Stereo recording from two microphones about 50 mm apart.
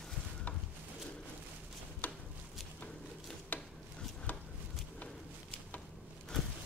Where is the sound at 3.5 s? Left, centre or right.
Left.